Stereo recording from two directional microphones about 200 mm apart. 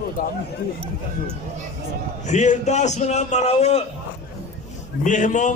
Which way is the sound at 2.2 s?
35° left (ahead or behind).